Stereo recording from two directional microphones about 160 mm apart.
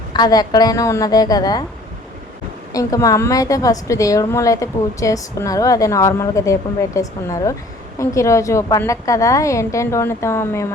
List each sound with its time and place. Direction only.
0.1 s a woman's voice: 25° left (ahead or behind)
2.7 s a woman's voice: 20° left (ahead or behind)